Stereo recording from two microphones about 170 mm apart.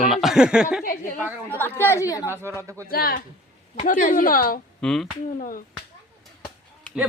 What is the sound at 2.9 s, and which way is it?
A woman's voice, 60° left (ahead or behind).